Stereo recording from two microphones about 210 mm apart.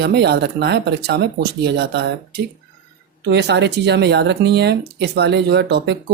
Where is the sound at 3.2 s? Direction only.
55° right (ahead or behind).